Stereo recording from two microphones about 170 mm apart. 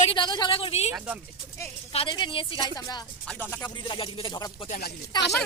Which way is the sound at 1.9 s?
30° left (ahead or behind).